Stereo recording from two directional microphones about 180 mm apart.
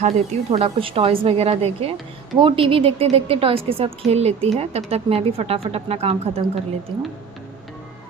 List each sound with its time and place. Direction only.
0.0 s a woman's voice: 35° right (ahead or behind)